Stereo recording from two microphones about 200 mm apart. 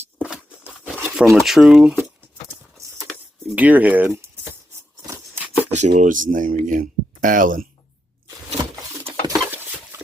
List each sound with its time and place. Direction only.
0.2 s crumpling: 10° right (ahead or behind)
3.1 s speech: 5° right (ahead or behind)
5.7 s speech: 35° right (ahead or behind)
9.2 s a sound: 15° right (ahead or behind)